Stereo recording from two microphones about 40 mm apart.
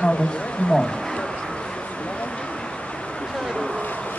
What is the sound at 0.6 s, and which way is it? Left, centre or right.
Speech, left.